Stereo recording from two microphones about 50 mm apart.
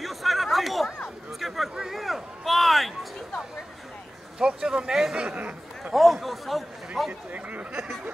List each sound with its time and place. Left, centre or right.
0.0 s chatter: centre
1.4 s a sound: centre
4.4 s speech: centre
5.1 s speech: right
5.9 s a sound: centre
7.1 s speech: right